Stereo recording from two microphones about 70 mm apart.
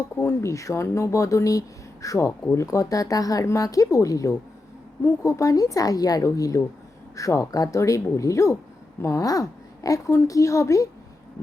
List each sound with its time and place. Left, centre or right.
0.2 s a woman's voice: left
6.2 s speech: left